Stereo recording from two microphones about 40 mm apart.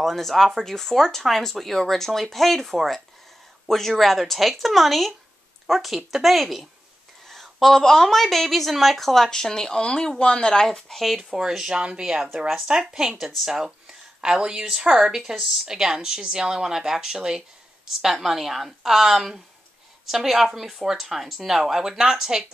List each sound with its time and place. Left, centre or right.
0.0 s speech: centre
7.6 s speech: centre
9.8 s speech: left
10.9 s speech: centre
11.3 s speech: centre
13.1 s speech: centre
13.5 s speech: centre